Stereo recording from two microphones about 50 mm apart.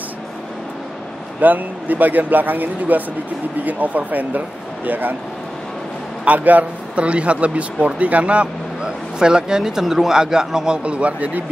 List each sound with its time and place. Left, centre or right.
1.4 s speech: right
6.2 s speech: right